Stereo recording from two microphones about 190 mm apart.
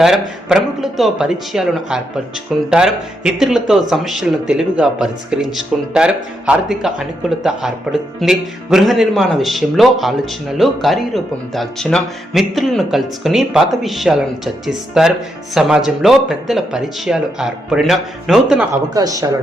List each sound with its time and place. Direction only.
0.0 s speech: centre (ahead or behind)
18.7 s speech: 20° right (ahead or behind)